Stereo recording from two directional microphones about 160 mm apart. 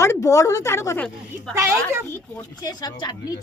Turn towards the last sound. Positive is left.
turn(degrees=25)  # may be behind; listen again after turning